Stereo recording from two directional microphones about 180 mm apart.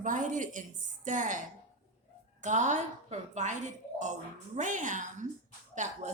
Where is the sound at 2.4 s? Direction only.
40° right (ahead or behind).